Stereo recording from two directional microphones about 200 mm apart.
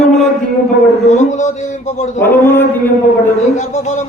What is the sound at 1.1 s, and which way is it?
Speech, 35° left (ahead or behind).